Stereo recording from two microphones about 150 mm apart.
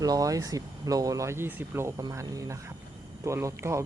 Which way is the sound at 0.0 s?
25° right (ahead or behind).